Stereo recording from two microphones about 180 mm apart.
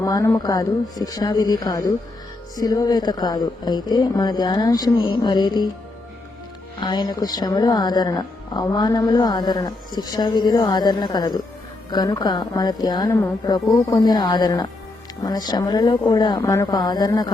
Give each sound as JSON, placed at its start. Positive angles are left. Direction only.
{"t": 0.0, "sound": "speech", "side_deg": 15}
{"t": 6.7, "sound": "speech", "side_deg": 25}